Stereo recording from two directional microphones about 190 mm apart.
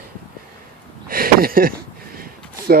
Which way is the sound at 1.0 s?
50° right (ahead or behind).